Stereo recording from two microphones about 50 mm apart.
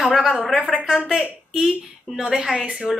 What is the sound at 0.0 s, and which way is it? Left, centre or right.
Speech, centre.